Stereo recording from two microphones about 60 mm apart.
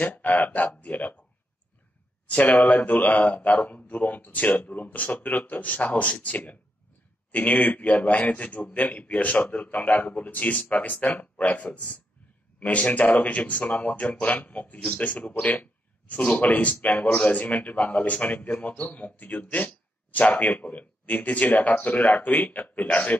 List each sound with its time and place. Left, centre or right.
0.0 s speech: left
2.2 s speech: left
15.4 s a sound: left
16.2 s speech: left